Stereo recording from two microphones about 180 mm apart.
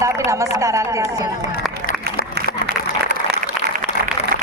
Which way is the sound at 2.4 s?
60° left (ahead or behind).